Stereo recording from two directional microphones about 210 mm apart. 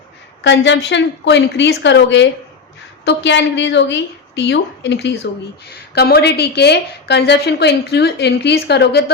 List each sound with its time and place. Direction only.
0.4 s a woman's voice: 60° left (ahead or behind)